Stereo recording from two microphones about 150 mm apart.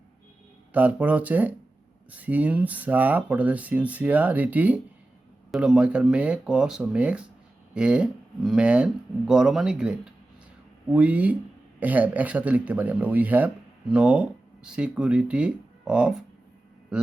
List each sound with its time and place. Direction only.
0.7 s speech: 10° right (ahead or behind)